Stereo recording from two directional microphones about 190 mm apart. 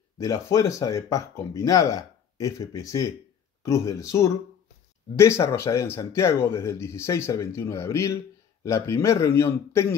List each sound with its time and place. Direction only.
0.2 s a man's voice: 15° left (ahead or behind)